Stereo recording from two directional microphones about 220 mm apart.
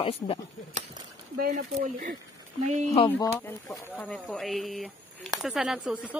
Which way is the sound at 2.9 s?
15° left (ahead or behind).